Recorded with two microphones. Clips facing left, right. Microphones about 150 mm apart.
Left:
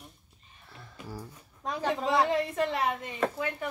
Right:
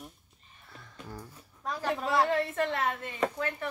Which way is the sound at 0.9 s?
5° left (ahead or behind).